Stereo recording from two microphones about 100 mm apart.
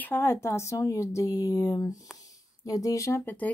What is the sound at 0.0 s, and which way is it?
Speech, 20° left (ahead or behind).